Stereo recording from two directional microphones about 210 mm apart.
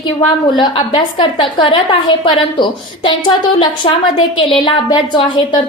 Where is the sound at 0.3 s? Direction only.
20° left (ahead or behind).